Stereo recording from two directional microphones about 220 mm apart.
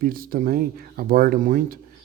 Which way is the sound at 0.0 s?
40° right (ahead or behind).